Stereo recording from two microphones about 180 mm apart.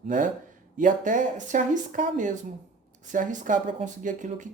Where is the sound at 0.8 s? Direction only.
45° right (ahead or behind).